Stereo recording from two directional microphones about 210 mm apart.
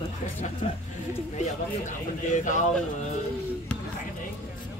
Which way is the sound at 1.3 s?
35° left (ahead or behind).